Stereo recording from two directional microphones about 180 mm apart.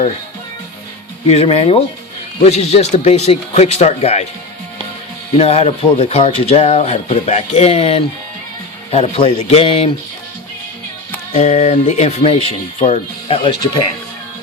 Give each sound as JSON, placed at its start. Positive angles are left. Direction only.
{"t": 1.3, "sound": "speech", "side_deg": 30}
{"t": 5.4, "sound": "speech", "side_deg": 35}
{"t": 11.3, "sound": "speech", "side_deg": 35}